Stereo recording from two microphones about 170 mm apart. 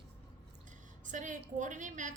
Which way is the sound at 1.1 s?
50° right (ahead or behind).